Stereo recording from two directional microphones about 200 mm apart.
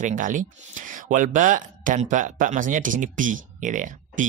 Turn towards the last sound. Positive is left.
turn(degrees=-40)  # may be behind; listen again after turning